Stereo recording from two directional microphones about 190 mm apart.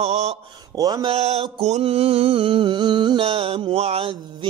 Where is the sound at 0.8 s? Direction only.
20° right (ahead or behind).